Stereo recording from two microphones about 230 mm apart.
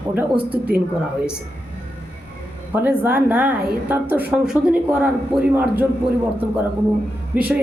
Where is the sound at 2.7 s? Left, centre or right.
Centre.